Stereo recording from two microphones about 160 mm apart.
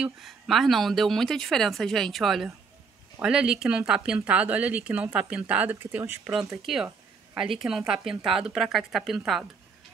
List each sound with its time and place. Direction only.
0.0 s a woman's voice: centre (ahead or behind)
6.6 s a woman's voice: centre (ahead or behind)